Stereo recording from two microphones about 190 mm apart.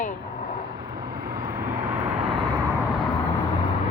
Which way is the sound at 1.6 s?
10° right (ahead or behind).